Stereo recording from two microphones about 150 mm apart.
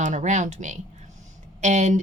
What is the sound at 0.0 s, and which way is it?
Speech, 55° right (ahead or behind).